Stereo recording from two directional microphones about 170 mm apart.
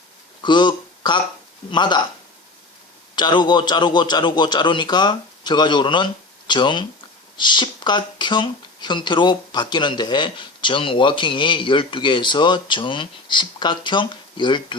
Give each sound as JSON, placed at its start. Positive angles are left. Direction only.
{"t": 0.4, "sound": "a sound", "side_deg": 25}
{"t": 1.7, "sound": "speech", "side_deg": 25}
{"t": 3.2, "sound": "speech", "side_deg": 25}